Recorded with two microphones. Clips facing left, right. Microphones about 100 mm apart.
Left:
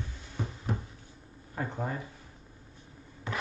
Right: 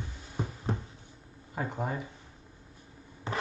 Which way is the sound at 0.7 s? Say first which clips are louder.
Even; 30° right (ahead or behind).